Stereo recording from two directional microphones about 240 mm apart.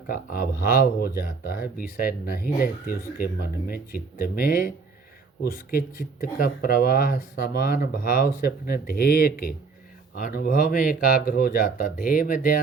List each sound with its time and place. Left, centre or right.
0.1 s speech: left